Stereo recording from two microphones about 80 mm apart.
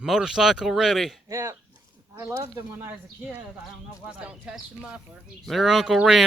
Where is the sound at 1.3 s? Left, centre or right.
Right.